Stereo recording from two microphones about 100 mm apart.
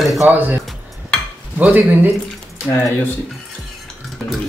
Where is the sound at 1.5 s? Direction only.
20° right (ahead or behind).